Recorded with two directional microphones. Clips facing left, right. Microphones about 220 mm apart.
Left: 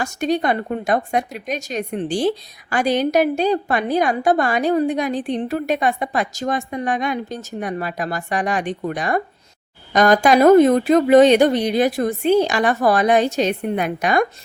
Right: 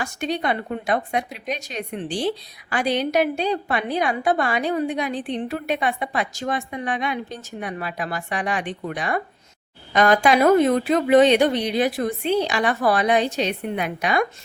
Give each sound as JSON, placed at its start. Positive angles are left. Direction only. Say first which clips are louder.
{"t": 0.0, "sound": "speech", "louder": "left 5 dB", "side_deg": 45}